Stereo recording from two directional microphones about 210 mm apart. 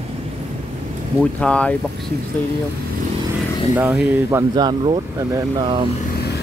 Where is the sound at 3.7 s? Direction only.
10° right (ahead or behind).